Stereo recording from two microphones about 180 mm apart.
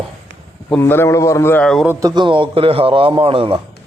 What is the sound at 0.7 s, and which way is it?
Speech, 10° left (ahead or behind).